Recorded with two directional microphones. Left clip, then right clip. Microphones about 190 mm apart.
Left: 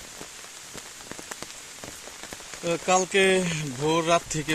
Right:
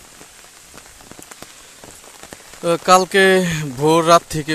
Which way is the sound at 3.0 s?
30° right (ahead or behind).